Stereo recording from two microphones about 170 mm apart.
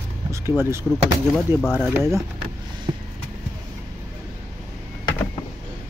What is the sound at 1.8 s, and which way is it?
Speech, 10° right (ahead or behind).